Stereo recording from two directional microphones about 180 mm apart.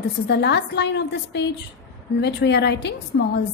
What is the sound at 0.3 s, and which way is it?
A woman's voice, 70° left (ahead or behind).